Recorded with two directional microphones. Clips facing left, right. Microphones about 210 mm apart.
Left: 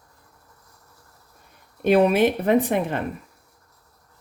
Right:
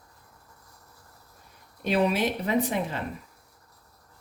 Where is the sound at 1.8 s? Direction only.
55° left (ahead or behind).